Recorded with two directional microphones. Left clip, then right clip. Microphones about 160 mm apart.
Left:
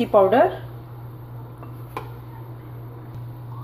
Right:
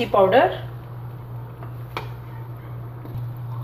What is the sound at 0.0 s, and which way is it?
Speech, 55° left (ahead or behind).